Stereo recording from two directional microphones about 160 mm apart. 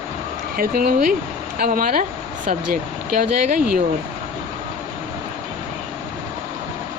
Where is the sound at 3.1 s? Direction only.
60° right (ahead or behind).